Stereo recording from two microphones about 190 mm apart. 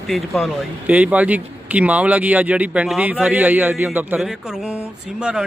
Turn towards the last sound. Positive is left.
turn(degrees=-5)  # may be behind; listen again after turning